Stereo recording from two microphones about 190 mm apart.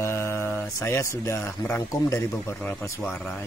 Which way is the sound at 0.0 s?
15° left (ahead or behind).